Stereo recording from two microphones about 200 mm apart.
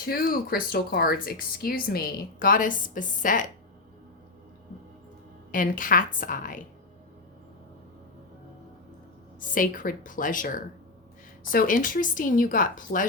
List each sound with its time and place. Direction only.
0.0 s speech: 50° left (ahead or behind)
5.5 s speech: 45° left (ahead or behind)
9.4 s a woman's voice: 40° left (ahead or behind)